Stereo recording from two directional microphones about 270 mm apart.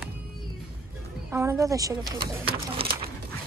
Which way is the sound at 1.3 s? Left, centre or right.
Centre.